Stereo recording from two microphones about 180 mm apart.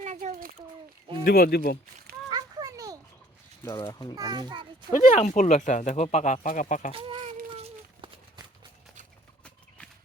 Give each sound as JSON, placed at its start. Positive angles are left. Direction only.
{"t": 0.0, "sound": "a sound", "side_deg": -45}
{"t": 1.2, "sound": "speech", "side_deg": 60}
{"t": 2.3, "sound": "children playing", "side_deg": -20}
{"t": 3.6, "sound": "speech", "side_deg": 20}
{"t": 4.1, "sound": "a child's voice", "side_deg": -20}
{"t": 4.9, "sound": "speech", "side_deg": 45}
{"t": 6.9, "sound": "a child's voice", "side_deg": -30}
{"t": 7.5, "sound": "a sound", "side_deg": -30}
{"t": 9.4, "sound": "horse", "side_deg": 5}